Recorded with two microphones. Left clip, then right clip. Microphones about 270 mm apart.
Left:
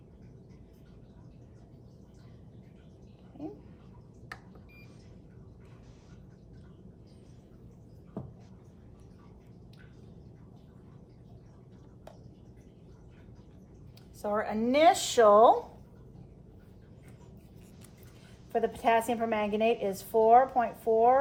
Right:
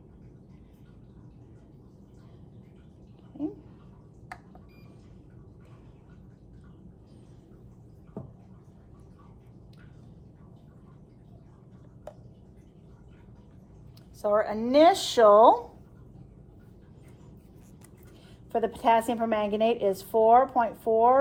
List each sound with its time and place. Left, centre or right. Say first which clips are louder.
14.2 s a woman's voice: right 6 dB; centre
18.5 s a woman's voice: right 3 dB; centre